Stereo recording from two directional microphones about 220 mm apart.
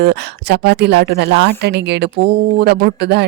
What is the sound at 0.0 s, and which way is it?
Speech, 50° right (ahead or behind).